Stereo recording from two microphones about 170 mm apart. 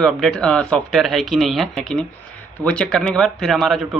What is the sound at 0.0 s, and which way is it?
Speech, 5° left (ahead or behind).